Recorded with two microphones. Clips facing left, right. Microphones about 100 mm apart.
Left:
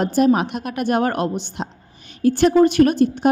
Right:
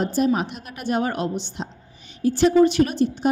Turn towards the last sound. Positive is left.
turn(degrees=55)  # may be behind; listen again after turning